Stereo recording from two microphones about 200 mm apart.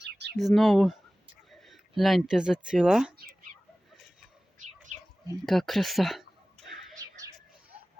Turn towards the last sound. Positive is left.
turn(degrees=-15)  # may be behind; listen again after turning